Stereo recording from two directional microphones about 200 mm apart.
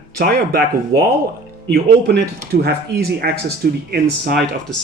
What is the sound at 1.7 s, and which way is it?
Speech, 55° right (ahead or behind).